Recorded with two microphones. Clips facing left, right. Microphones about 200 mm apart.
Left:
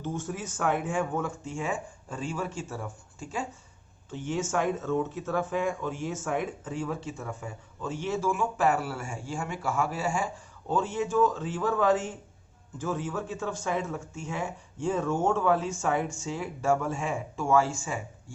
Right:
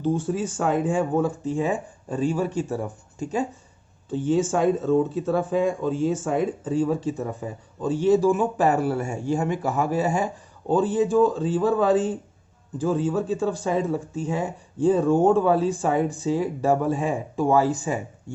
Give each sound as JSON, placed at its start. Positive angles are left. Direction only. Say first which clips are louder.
{"t": 0.0, "sound": "speech", "louder": "right 10 dB", "side_deg": -30}
{"t": 8.7, "sound": "speech", "louder": "right 7 dB", "side_deg": -20}
{"t": 9.3, "sound": "speech", "louder": "right 7 dB", "side_deg": -40}
{"t": 17.8, "sound": "speech", "louder": "right 8 dB", "side_deg": -20}